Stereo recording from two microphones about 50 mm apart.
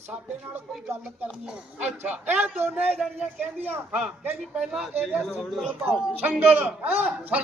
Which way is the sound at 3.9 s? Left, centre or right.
Right.